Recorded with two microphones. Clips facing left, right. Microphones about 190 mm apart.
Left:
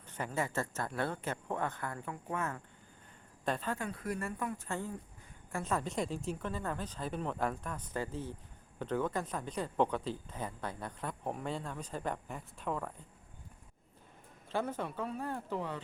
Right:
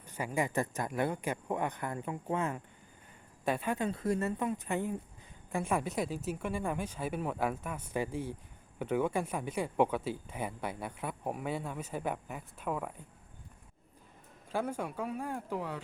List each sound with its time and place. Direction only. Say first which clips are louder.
0.0 s speech: right 3 dB; 10° right (ahead or behind)
14.5 s speech: right 1 dB; 10° right (ahead or behind)